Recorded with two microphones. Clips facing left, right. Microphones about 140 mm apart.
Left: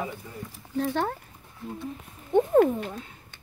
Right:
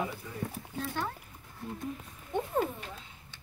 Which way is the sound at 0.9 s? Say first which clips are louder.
Left 6 dB; 65° left (ahead or behind).